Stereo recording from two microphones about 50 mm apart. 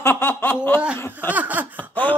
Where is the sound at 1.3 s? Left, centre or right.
Right.